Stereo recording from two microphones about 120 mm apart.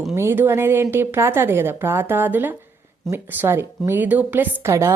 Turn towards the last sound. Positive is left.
turn(degrees=-25)  # may be behind; listen again after turning